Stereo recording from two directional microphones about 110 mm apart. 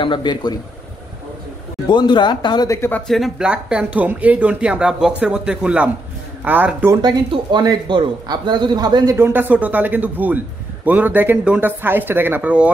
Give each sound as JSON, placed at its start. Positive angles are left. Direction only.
{"t": 0.0, "sound": "speech", "side_deg": 45}
{"t": 1.9, "sound": "speech", "side_deg": 45}
{"t": 2.7, "sound": "speech", "side_deg": 20}
{"t": 3.1, "sound": "speech", "side_deg": -5}
{"t": 7.0, "sound": "a man's voice", "side_deg": -40}
{"t": 9.1, "sound": "speech", "side_deg": -20}